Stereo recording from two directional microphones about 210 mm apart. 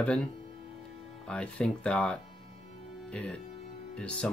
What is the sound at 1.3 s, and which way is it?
Speech, 5° left (ahead or behind).